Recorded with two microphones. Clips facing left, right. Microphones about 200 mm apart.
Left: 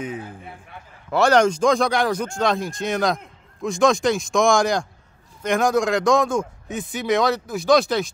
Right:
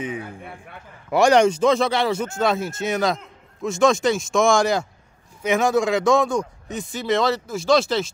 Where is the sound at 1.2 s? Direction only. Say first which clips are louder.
Right 1 dB; 10° right (ahead or behind).